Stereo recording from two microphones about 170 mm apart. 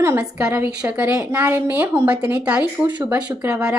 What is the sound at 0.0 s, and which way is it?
A woman's voice, 15° right (ahead or behind).